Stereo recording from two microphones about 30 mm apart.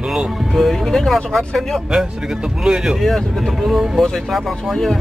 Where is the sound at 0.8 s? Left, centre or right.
Centre.